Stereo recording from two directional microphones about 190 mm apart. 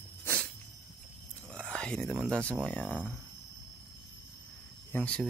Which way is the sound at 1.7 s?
5° left (ahead or behind).